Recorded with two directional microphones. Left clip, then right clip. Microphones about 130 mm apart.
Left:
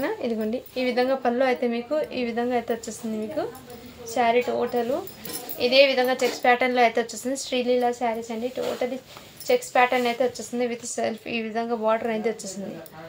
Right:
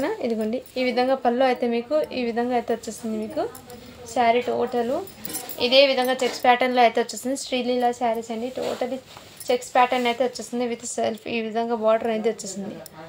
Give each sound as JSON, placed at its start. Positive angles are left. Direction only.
{"t": 0.3, "sound": "a woman's voice", "side_deg": -40}